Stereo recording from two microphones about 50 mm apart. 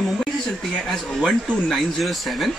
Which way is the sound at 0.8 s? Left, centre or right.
Centre.